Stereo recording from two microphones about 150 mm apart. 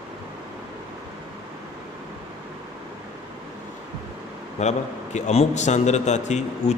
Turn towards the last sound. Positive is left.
turn(degrees=50)  # may be behind; listen again after turning